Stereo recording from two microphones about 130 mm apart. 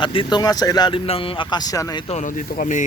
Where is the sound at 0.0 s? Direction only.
40° left (ahead or behind).